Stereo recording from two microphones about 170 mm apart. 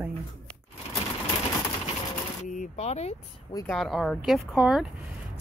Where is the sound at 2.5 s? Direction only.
45° left (ahead or behind).